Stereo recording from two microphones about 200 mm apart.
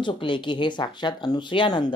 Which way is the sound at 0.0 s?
25° left (ahead or behind).